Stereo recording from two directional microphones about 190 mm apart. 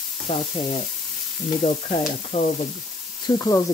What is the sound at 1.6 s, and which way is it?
Stir, 40° left (ahead or behind).